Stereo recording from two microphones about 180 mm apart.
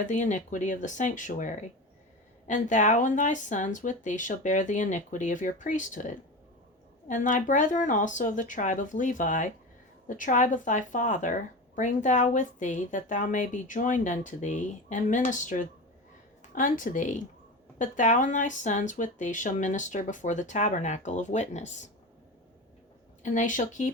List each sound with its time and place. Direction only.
0.0 s speech: 45° left (ahead or behind)
23.2 s speech: 45° left (ahead or behind)